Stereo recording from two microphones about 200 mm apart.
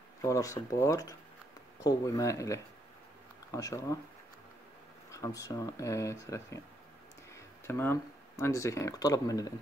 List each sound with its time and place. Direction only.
0.2 s speech: 15° left (ahead or behind)
5.1 s speech: 15° left (ahead or behind)